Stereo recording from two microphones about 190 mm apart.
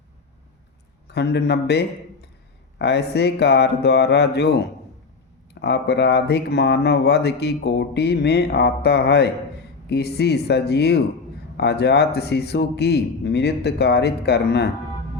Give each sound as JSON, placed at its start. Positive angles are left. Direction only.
{"t": 1.0, "sound": "speech", "side_deg": 60}